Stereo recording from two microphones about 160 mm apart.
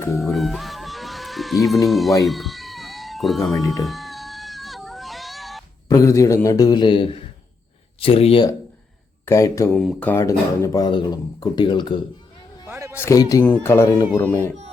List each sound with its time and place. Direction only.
0.2 s music: centre (ahead or behind)
1.9 s speech: centre (ahead or behind)
2.2 s cat: centre (ahead or behind)
3.8 s a sound: centre (ahead or behind)
5.9 s speech: 20° left (ahead or behind); by 8.4 s 35° left (ahead or behind)
9.2 s speech: 20° left (ahead or behind)
9.7 s speech: 5° left (ahead or behind); by 11.9 s 30° left (ahead or behind)
12.6 s a sound: 15° right (ahead or behind)
13.0 s speech: 20° left (ahead or behind)